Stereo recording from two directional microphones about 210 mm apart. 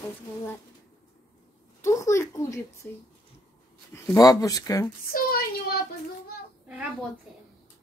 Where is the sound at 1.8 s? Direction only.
15° left (ahead or behind).